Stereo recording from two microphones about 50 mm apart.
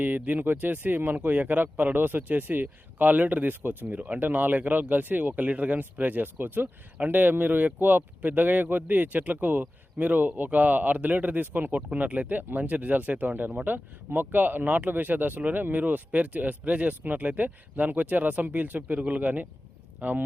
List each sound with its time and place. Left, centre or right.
0.0 s speech: right